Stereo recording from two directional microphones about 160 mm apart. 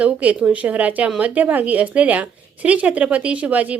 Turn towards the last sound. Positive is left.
turn(degrees=-10)  # may be behind; listen again after turning